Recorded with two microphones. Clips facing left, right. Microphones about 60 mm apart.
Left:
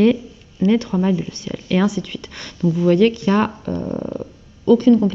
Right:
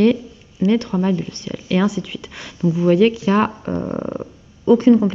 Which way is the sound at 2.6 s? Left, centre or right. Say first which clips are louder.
Even; centre.